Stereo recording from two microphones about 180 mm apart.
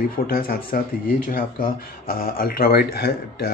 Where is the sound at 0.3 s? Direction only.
55° left (ahead or behind).